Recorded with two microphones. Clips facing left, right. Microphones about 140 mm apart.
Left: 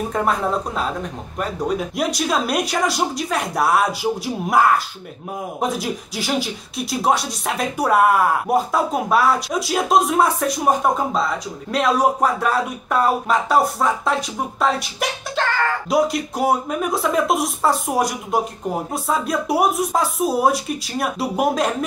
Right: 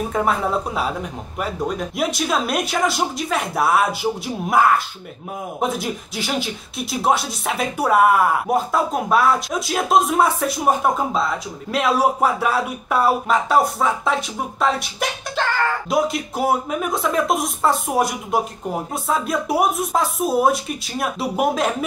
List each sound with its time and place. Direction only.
0.1 s speech: centre (ahead or behind)